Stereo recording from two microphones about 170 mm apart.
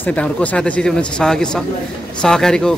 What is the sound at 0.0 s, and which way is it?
Speech, 10° left (ahead or behind).